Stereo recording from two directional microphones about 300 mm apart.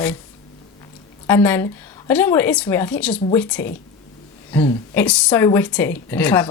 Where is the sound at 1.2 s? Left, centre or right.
Centre.